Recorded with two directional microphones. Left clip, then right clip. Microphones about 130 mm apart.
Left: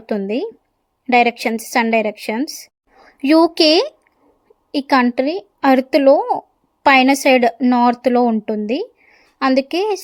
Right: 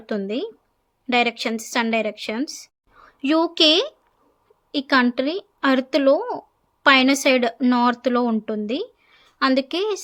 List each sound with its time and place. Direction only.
0.0 s a woman's voice: 35° left (ahead or behind)
5.1 s speech: 30° left (ahead or behind)
6.1 s speech: 5° left (ahead or behind)
6.8 s a woman's voice: 30° left (ahead or behind)